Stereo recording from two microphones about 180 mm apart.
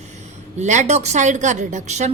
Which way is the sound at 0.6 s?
40° right (ahead or behind).